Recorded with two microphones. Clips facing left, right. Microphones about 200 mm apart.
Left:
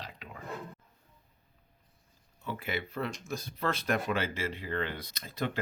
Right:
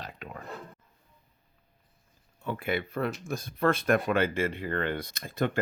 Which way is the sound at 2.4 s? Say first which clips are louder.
Right 5 dB; 55° right (ahead or behind).